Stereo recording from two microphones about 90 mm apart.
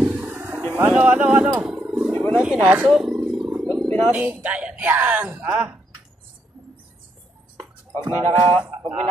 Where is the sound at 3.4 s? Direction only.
10° right (ahead or behind).